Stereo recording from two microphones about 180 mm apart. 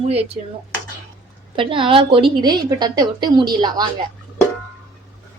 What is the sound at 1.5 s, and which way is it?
A woman's voice, 30° right (ahead or behind).